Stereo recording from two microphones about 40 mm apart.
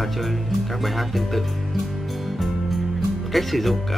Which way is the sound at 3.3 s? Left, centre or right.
Centre.